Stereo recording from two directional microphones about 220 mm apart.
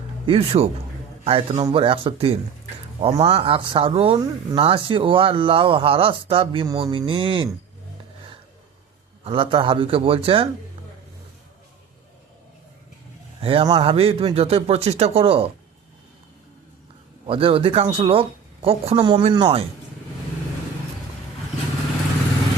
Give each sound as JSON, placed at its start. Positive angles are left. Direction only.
{"t": 0.3, "sound": "speech", "side_deg": -25}
{"t": 9.2, "sound": "speech", "side_deg": -25}
{"t": 13.4, "sound": "speech", "side_deg": -25}
{"t": 17.2, "sound": "speech", "side_deg": -25}